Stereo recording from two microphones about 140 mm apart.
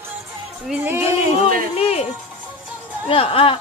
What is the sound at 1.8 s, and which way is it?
Music, 45° left (ahead or behind).